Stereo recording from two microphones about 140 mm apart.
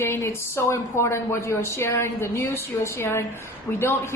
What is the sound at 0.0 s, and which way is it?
A woman's voice, 15° left (ahead or behind).